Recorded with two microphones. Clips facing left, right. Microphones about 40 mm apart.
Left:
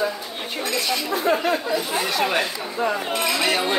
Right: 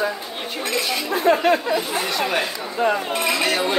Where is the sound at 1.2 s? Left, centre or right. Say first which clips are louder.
Right 5 dB; right.